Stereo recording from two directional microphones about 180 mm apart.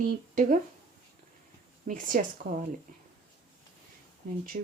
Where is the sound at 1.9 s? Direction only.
50° right (ahead or behind).